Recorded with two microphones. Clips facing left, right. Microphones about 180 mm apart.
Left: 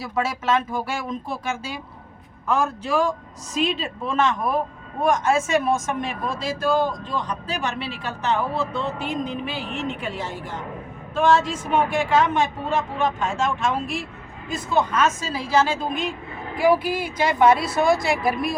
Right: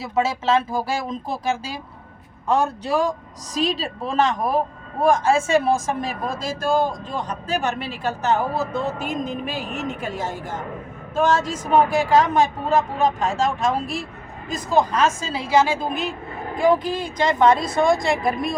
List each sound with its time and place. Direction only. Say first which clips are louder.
0.0 s a woman's voice: right 3 dB; 25° right (ahead or behind); by 16.1 s 5° right (ahead or behind)
16.6 s a woman's voice: even; 5° left (ahead or behind)